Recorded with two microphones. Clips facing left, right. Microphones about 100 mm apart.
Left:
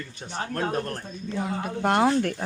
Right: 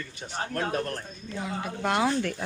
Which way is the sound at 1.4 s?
45° left (ahead or behind).